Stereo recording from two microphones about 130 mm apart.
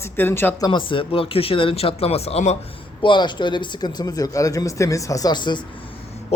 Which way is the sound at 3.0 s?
35° left (ahead or behind).